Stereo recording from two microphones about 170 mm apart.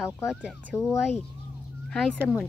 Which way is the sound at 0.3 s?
Centre (ahead or behind).